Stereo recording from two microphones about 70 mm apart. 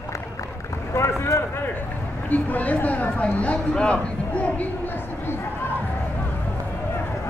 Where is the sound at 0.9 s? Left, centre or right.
Left.